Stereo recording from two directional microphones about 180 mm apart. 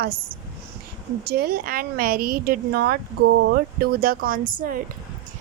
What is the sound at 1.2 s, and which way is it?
Speech, 60° right (ahead or behind).